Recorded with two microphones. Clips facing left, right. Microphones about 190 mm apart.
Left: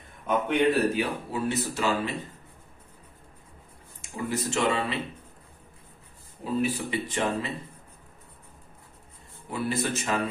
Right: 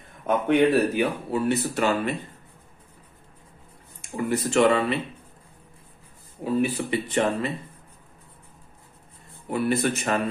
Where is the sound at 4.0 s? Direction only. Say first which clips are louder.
Right 5 dB; 60° right (ahead or behind).